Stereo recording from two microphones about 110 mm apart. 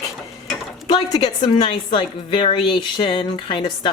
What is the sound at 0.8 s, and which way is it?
A woman's voice, 40° left (ahead or behind).